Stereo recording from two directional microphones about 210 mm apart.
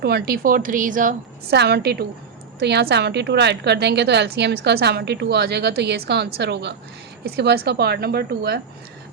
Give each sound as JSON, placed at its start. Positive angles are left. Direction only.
{"t": 0.0, "sound": "a woman's voice", "side_deg": -50}